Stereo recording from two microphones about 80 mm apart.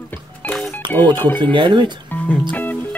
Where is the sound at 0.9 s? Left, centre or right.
Left.